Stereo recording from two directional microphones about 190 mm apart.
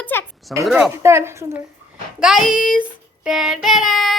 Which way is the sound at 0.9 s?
15° right (ahead or behind).